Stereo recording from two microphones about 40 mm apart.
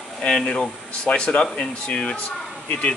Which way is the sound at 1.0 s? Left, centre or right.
Left.